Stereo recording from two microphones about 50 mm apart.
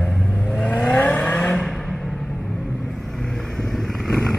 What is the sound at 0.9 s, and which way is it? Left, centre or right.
Vehicle, left.